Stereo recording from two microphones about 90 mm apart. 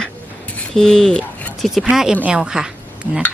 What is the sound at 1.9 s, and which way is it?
Speech, 5° right (ahead or behind).